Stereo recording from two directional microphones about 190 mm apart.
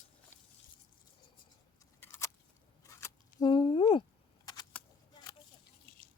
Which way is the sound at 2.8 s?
20° left (ahead or behind).